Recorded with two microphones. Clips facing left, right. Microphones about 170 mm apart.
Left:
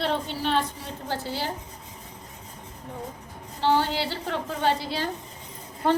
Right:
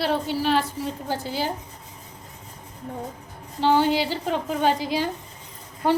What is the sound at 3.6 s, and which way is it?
A woman's voice, 15° right (ahead or behind).